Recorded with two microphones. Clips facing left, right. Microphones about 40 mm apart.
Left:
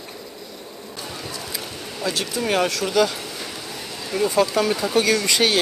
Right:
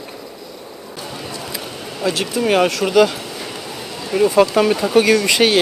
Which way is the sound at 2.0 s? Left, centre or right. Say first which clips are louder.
Right 6 dB; centre.